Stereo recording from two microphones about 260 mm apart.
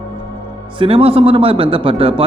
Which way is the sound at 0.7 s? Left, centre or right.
Right.